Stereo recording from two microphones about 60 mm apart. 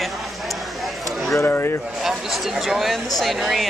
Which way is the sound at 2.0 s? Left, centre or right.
Centre.